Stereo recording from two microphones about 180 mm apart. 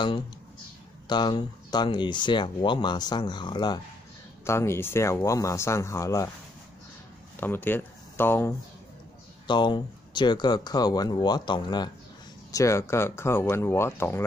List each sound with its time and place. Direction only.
1.0 s speech: 25° left (ahead or behind)
7.3 s speech: 10° left (ahead or behind)
9.5 s speech: 25° left (ahead or behind)